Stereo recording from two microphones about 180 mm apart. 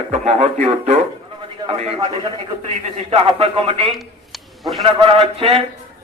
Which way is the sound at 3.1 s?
35° right (ahead or behind).